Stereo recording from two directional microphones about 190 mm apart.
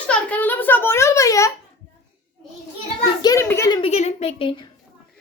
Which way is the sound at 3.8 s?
35° left (ahead or behind).